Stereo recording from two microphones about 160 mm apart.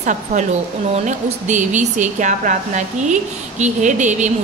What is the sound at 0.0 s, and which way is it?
A woman's voice, 50° right (ahead or behind).